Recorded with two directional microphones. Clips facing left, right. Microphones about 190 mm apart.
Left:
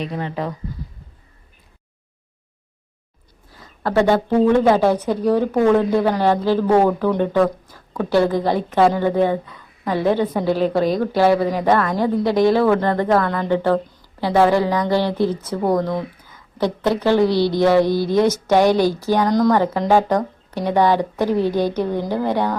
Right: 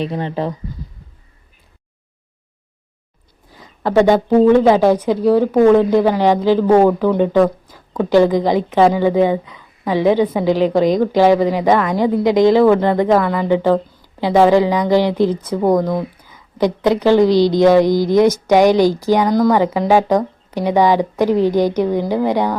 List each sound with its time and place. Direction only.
0.0 s speech: 30° right (ahead or behind)
3.5 s a sound: 15° right (ahead or behind)
4.7 s a woman's voice: 10° right (ahead or behind)